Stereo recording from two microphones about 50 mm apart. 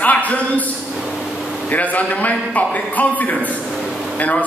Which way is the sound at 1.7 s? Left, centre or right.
Left.